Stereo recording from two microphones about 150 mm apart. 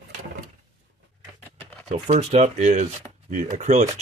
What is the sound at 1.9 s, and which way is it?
Speech, 45° right (ahead or behind).